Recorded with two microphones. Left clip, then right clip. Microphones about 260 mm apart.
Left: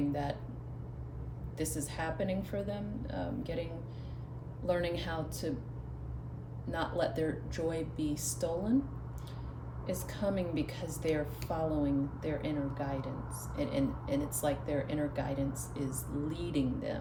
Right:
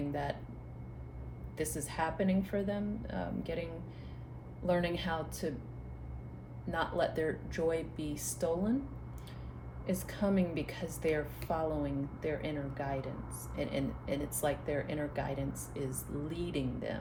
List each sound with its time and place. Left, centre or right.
0.1 s a sound: right
1.7 s a woman's voice: right
6.7 s a woman's voice: right
9.8 s a woman's voice: right